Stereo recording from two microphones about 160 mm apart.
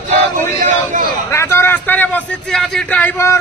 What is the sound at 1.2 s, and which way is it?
A man's voice, 15° left (ahead or behind).